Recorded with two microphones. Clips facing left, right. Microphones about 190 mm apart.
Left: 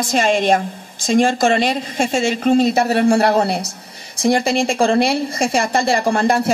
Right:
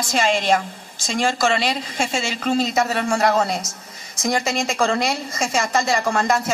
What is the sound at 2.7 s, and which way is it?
A woman's voice, 30° left (ahead or behind).